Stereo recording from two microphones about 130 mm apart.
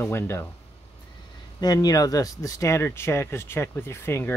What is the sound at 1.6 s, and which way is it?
Speech, 30° left (ahead or behind).